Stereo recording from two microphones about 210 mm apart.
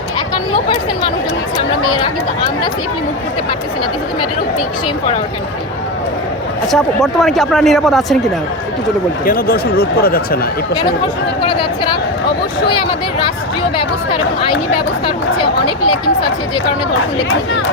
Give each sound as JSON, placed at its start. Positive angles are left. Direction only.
{"t": 6.7, "sound": "speech", "side_deg": 0}
{"t": 9.2, "sound": "speech", "side_deg": 45}
{"t": 12.6, "sound": "speech", "side_deg": 25}